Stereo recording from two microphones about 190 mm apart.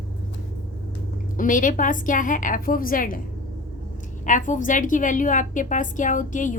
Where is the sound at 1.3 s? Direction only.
45° left (ahead or behind).